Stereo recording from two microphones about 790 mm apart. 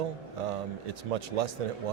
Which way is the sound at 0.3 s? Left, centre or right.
Right.